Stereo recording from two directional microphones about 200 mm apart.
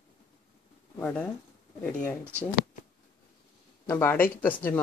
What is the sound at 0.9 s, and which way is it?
Speech, 10° left (ahead or behind).